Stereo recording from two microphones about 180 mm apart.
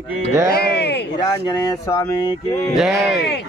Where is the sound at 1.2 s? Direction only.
20° left (ahead or behind).